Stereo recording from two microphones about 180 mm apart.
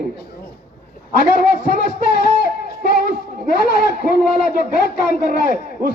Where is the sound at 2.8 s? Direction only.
60° left (ahead or behind).